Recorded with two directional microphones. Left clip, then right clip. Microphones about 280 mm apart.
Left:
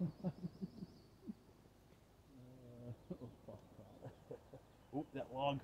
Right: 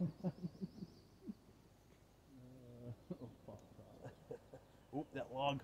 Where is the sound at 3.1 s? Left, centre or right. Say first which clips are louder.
Right 1 dB; centre.